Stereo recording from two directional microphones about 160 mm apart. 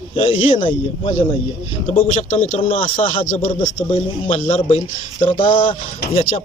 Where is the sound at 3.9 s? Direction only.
35° left (ahead or behind).